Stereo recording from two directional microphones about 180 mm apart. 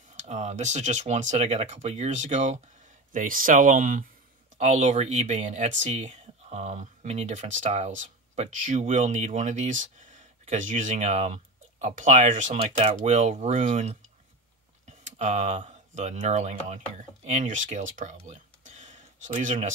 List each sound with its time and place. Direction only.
0.1 s speech: 40° right (ahead or behind)